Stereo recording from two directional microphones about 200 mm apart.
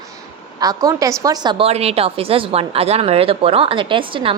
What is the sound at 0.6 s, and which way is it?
A woman's voice, 20° right (ahead or behind).